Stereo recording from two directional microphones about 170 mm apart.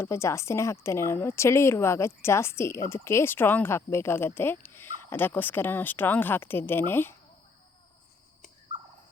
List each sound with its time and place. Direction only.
0.0 s a woman's voice: 15° left (ahead or behind)